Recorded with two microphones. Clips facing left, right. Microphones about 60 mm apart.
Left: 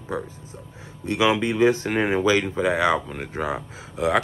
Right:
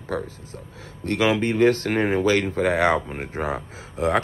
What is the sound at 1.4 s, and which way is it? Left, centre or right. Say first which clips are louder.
Speech: right 1 dB; right.